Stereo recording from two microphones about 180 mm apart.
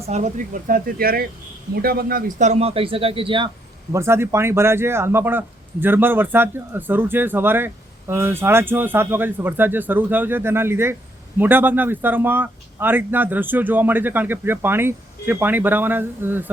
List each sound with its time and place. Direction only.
0.1 s a man's voice: 45° right (ahead or behind); by 3.5 s 30° right (ahead or behind)
3.9 s speech: 15° right (ahead or behind)